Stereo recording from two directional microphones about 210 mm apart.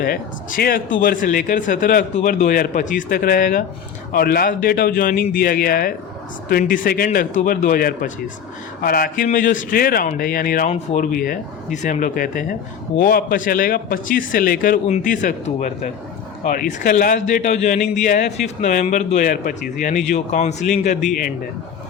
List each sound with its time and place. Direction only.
0.0 s a man's voice: 45° left (ahead or behind)